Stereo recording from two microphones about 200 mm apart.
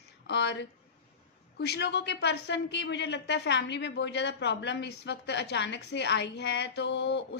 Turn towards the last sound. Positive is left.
turn(degrees=60)  # may be behind; listen again after turning